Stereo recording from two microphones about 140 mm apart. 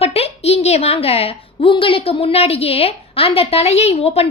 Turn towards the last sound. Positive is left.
turn(degrees=45)  # may be behind; listen again after turning